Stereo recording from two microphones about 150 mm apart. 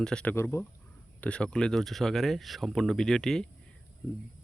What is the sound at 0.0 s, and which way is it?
Speech, 5° left (ahead or behind).